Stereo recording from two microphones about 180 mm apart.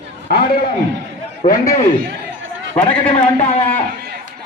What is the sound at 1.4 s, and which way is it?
Speech, 40° left (ahead or behind).